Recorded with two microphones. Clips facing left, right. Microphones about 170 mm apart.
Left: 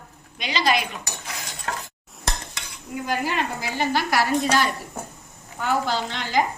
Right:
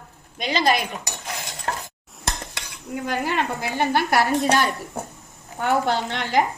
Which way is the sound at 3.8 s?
55° right (ahead or behind).